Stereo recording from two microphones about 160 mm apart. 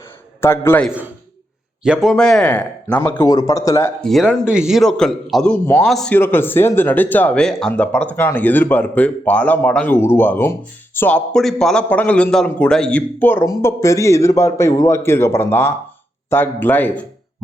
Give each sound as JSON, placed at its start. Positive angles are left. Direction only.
{"t": 0.4, "sound": "speech", "side_deg": 15}
{"t": 1.8, "sound": "speech", "side_deg": -5}
{"t": 4.0, "sound": "speech", "side_deg": 5}
{"t": 6.1, "sound": "speech", "side_deg": 15}